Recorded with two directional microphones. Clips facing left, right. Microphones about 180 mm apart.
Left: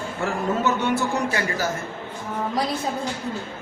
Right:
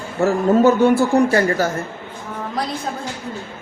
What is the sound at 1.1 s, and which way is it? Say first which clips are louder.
Speech: right 9 dB; 55° right (ahead or behind).